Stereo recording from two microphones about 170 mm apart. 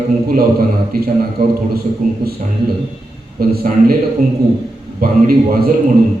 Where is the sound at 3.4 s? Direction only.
65° right (ahead or behind).